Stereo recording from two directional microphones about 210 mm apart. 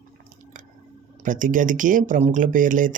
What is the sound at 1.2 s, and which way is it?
Speech, 40° right (ahead or behind).